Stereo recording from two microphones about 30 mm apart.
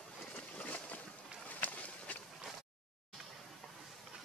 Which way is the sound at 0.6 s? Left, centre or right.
Left.